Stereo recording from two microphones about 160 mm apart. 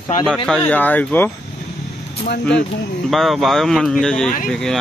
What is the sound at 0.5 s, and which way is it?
Speech, 10° left (ahead or behind).